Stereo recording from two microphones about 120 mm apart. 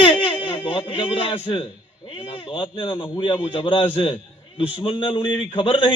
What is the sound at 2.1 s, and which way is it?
A man's voice, 55° left (ahead or behind).